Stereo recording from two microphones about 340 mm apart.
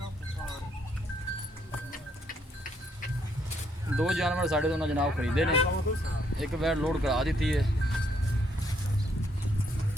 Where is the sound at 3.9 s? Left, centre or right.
Centre.